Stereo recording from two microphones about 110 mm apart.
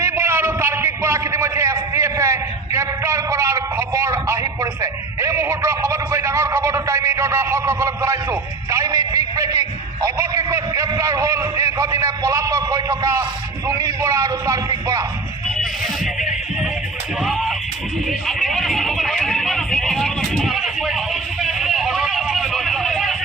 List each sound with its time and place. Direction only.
0.0 s a man's voice: 25° right (ahead or behind)
17.2 s music: centre (ahead or behind)
18.3 s a sound: 5° left (ahead or behind)